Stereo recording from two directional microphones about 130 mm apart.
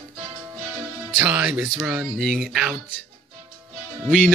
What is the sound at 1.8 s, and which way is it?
Speech, 5° right (ahead or behind).